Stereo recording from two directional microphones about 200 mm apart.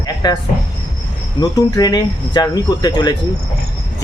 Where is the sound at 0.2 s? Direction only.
20° left (ahead or behind).